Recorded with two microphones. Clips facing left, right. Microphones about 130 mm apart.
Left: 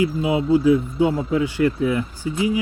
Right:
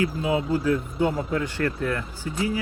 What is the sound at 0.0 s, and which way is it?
Speech, 10° left (ahead or behind).